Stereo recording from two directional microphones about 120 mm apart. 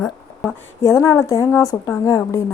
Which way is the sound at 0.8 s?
25° left (ahead or behind).